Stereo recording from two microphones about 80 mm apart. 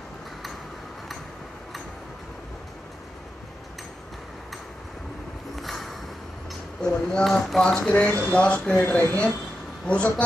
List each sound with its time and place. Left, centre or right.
5.6 s a sound: centre
7.1 s speech: centre
7.6 s speech: centre
8.7 s speech: left